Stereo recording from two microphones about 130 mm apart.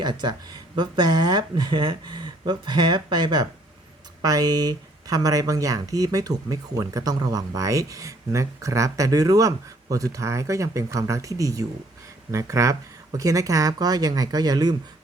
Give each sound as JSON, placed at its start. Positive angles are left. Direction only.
{"t": 0.0, "sound": "speech", "side_deg": -35}